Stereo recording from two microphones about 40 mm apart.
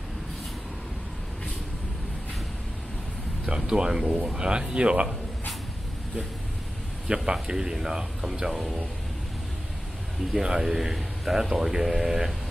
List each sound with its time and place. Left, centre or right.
3.4 s speech: right
7.1 s a man's voice: right
7.4 s a man's voice: centre
10.4 s a man's voice: centre